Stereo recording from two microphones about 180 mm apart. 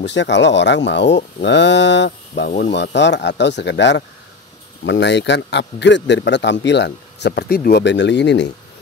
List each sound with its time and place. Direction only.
0.0 s a man's voice: 80° left